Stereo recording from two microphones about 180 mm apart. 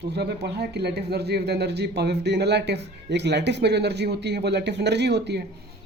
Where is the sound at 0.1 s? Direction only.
65° right (ahead or behind).